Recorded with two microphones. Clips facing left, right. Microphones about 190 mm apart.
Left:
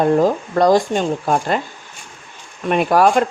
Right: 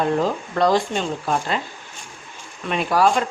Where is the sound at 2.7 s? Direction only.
50° left (ahead or behind).